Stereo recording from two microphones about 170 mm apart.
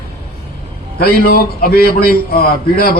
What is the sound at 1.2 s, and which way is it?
Speech, 60° left (ahead or behind).